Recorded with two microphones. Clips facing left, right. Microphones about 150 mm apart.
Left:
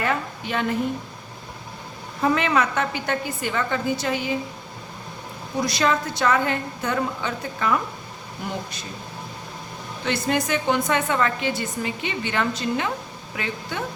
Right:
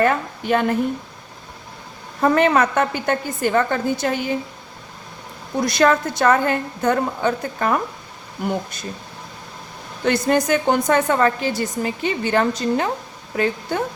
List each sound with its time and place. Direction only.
0.0 s a woman's voice: 50° right (ahead or behind)
2.2 s a woman's voice: 50° right (ahead or behind)
5.6 s a woman's voice: 55° right (ahead or behind)
10.1 s a woman's voice: 45° right (ahead or behind)